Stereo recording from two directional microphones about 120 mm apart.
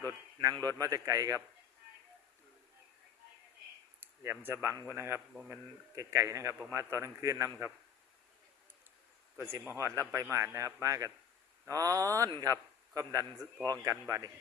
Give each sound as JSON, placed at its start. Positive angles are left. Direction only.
{"t": 0.0, "sound": "speech", "side_deg": -35}
{"t": 4.0, "sound": "a man's voice", "side_deg": -15}
{"t": 9.4, "sound": "a man's voice", "side_deg": -25}